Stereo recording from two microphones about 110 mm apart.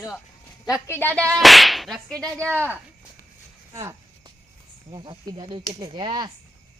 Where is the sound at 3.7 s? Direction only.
25° right (ahead or behind).